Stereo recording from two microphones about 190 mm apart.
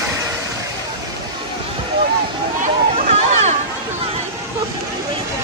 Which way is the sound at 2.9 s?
35° right (ahead or behind).